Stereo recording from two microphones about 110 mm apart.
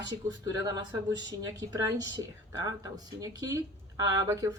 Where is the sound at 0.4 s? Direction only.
35° right (ahead or behind).